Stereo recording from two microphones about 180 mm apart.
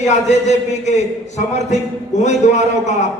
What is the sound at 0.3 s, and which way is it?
A man's voice, 40° left (ahead or behind).